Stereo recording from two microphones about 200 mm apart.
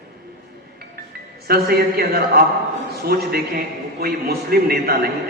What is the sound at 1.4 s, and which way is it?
Speech, 50° right (ahead or behind).